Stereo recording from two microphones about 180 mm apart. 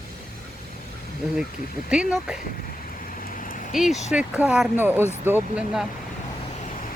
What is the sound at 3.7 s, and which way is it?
Speech, centre (ahead or behind).